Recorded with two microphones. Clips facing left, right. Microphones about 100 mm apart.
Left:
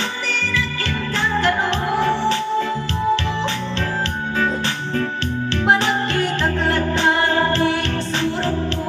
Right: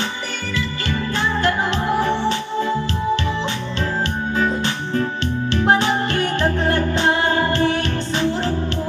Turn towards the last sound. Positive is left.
turn(degrees=-20)  # may be behind; listen again after turning